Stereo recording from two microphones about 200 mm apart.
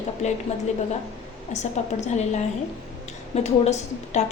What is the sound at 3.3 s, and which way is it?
Speech, 35° left (ahead or behind).